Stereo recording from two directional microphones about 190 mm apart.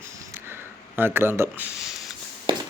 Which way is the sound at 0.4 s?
10° right (ahead or behind).